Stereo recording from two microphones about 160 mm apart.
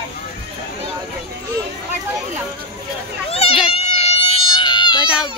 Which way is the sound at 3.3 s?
35° left (ahead or behind).